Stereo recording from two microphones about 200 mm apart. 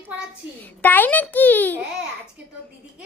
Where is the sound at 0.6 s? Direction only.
10° left (ahead or behind).